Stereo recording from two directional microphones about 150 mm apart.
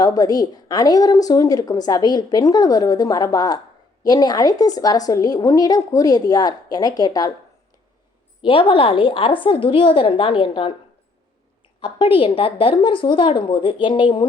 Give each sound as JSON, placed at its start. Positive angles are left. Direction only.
{"t": 0.0, "sound": "a woman's voice", "side_deg": 25}
{"t": 8.4, "sound": "a woman's voice", "side_deg": 35}
{"t": 11.8, "sound": "a woman's voice", "side_deg": 35}